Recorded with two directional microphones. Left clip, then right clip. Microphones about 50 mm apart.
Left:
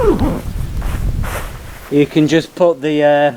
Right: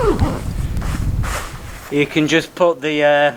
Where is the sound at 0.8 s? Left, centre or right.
Right.